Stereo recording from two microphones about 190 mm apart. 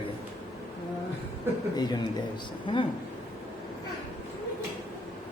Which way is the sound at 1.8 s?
20° left (ahead or behind).